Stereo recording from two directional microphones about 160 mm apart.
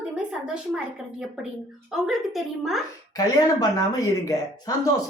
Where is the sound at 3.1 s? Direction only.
25° left (ahead or behind).